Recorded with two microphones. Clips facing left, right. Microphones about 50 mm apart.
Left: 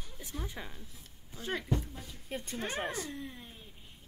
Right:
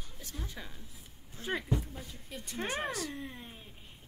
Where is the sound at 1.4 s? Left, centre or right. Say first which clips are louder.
Even; centre.